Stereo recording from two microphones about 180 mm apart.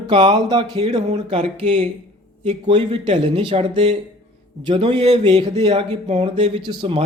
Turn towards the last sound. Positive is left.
turn(degrees=-30)  # may be behind; listen again after turning